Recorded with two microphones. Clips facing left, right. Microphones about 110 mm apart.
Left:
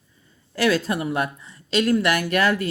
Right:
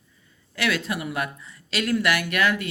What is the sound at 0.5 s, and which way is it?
Speech, 35° left (ahead or behind).